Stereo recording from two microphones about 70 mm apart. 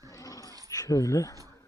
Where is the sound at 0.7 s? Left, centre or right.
Left.